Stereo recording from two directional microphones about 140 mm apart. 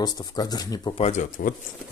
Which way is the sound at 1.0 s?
55° left (ahead or behind).